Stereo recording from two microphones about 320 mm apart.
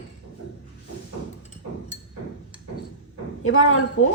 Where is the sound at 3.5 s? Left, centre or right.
Left.